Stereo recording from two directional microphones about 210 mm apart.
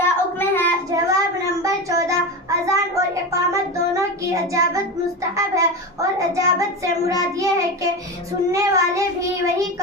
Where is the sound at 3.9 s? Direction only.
15° right (ahead or behind).